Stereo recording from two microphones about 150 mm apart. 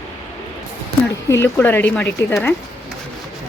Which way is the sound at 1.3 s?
15° left (ahead or behind).